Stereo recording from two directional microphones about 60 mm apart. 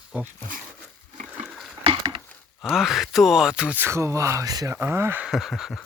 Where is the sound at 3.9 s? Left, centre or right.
Right.